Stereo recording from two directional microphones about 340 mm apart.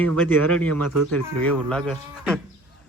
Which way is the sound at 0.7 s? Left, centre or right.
Right.